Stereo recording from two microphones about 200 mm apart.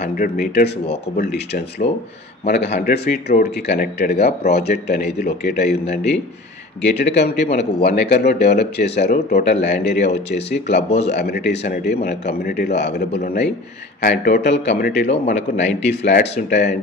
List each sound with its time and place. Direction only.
0.0 s speech: 50° left (ahead or behind)
1.8 s speech: 30° left (ahead or behind)
2.4 s speech: 55° left (ahead or behind)
13.2 s speech: 50° left (ahead or behind)
15.0 s speech: 35° left (ahead or behind)
15.9 s speech: 55° left (ahead or behind)